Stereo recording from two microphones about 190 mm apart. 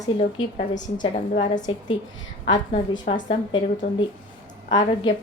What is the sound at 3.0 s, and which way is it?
A woman's voice, 30° left (ahead or behind).